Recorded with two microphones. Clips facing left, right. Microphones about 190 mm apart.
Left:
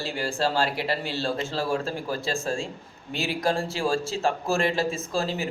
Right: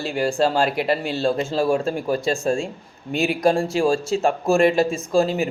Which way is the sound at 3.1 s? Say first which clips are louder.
Right 8 dB; 55° right (ahead or behind).